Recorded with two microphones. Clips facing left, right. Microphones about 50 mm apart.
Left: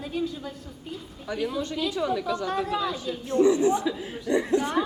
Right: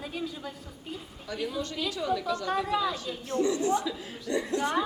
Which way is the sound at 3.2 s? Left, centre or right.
Left.